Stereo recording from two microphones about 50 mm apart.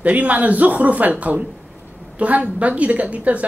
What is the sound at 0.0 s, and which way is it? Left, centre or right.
Speech, right.